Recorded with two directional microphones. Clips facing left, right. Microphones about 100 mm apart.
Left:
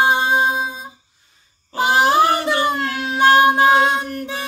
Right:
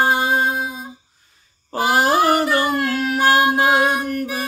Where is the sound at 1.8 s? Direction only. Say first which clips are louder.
Left 1 dB; 20° left (ahead or behind).